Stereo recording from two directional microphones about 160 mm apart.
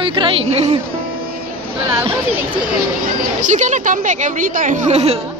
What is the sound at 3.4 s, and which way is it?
A woman's voice, 50° right (ahead or behind).